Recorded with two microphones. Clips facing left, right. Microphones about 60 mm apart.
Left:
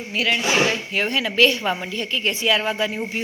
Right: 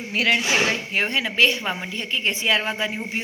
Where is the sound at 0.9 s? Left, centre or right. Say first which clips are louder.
Left 2 dB; right.